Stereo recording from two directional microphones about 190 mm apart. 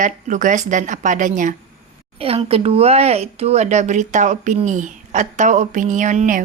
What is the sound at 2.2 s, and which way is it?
A woman's voice, 30° right (ahead or behind).